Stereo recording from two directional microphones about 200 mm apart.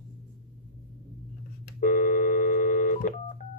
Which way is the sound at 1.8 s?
40° left (ahead or behind).